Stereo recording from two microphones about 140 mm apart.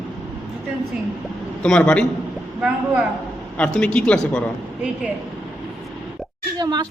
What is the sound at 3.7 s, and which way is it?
Speech, 10° left (ahead or behind).